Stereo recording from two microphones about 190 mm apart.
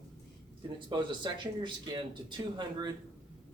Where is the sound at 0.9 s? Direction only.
25° right (ahead or behind).